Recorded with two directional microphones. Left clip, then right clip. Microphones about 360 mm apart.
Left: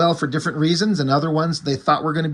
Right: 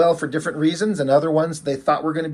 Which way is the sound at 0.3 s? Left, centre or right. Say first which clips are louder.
Even; centre.